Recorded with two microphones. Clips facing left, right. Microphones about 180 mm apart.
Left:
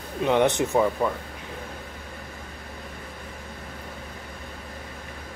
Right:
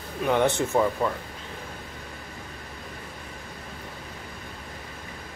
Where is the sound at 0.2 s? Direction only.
20° left (ahead or behind).